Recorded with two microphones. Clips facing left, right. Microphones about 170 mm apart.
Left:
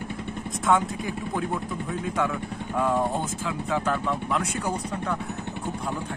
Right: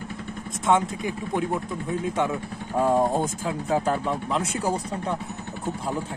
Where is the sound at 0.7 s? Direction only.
20° right (ahead or behind).